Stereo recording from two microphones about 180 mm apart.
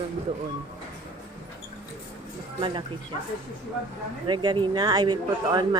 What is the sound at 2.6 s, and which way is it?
Speech, 30° right (ahead or behind).